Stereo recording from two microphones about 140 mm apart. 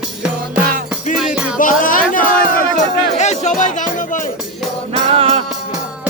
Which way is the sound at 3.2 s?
55° left (ahead or behind).